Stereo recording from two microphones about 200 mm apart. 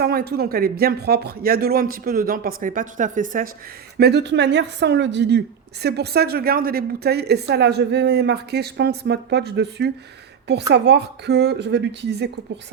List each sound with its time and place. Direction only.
0.0 s speech: 50° right (ahead or behind)
3.9 s a woman's voice: 55° right (ahead or behind)